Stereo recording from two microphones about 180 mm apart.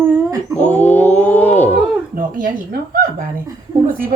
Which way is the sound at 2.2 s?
50° right (ahead or behind).